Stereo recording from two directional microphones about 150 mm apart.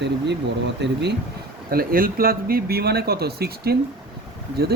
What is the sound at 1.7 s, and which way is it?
Speech, 80° right.